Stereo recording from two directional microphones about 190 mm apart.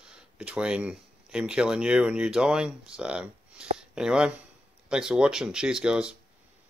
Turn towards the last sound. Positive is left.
turn(degrees=-5)  # may be behind; listen again after turning